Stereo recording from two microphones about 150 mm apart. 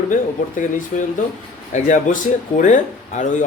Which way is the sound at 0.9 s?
60° left (ahead or behind).